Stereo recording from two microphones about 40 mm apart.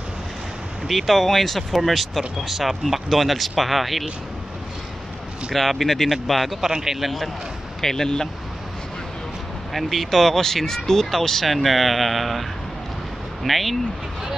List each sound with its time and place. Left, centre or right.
0.8 s speech: centre
5.5 s speech: centre
6.7 s speech: centre
7.0 s speech: centre
7.8 s speech: centre
9.8 s speech: centre